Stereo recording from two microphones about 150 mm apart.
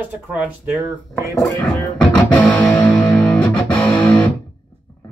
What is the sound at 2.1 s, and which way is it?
Music, 5° left (ahead or behind).